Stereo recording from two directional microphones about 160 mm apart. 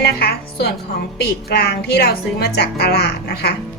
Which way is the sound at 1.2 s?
85° left.